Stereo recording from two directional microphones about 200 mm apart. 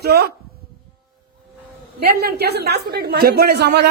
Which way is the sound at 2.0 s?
50° right (ahead or behind).